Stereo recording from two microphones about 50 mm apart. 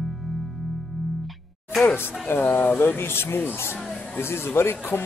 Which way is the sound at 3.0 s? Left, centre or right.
Left.